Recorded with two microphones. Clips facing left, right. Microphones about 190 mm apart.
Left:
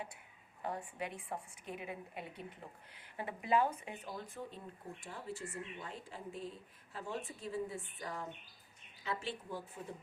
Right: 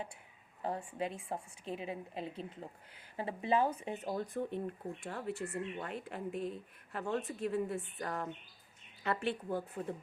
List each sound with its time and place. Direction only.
0.6 s a woman's voice: 30° right (ahead or behind)
4.4 s speech: 60° right (ahead or behind)